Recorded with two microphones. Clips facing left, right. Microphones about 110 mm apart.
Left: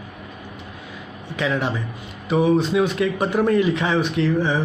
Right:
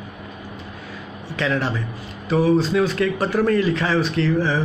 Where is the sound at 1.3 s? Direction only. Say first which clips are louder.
Even; 10° left (ahead or behind).